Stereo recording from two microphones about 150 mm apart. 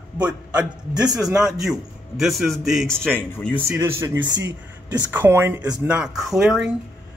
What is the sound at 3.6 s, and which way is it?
Speech, 15° right (ahead or behind).